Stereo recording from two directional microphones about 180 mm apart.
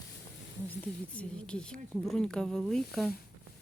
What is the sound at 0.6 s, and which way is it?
Speech, 5° left (ahead or behind).